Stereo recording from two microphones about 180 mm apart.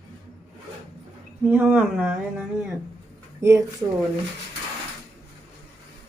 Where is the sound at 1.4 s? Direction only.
10° right (ahead or behind).